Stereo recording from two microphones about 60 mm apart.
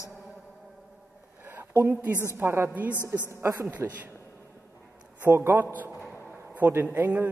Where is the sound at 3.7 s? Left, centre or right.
Right.